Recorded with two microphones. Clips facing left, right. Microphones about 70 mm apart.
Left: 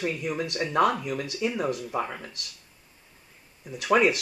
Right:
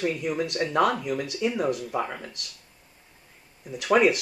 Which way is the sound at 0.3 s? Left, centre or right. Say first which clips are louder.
Right 2 dB; centre.